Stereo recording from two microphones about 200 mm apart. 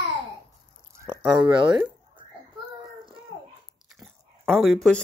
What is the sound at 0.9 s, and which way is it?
Speech, 15° right (ahead or behind).